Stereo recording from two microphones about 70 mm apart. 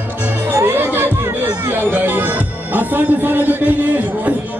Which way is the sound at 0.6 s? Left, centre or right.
Right.